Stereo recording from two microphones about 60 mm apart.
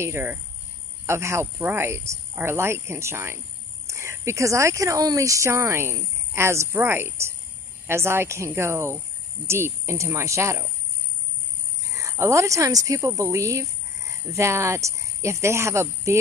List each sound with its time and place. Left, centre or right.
0.0 s speech: right
1.6 s speech: right
6.8 s speech: right
11.9 s speech: right
13.2 s a sound: right
14.3 s speech: right